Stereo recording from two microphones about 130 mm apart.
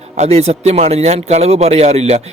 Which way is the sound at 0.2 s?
55° right (ahead or behind).